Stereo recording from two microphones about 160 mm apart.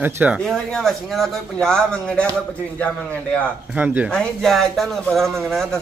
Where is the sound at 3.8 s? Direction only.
10° right (ahead or behind).